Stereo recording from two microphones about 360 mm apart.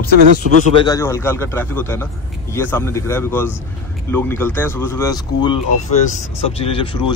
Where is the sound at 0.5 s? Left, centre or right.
Right.